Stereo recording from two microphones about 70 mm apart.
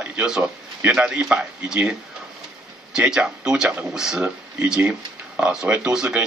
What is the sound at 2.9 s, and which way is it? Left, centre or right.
A man's voice, centre.